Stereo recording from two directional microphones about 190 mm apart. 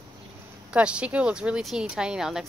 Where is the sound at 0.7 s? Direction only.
5° right (ahead or behind).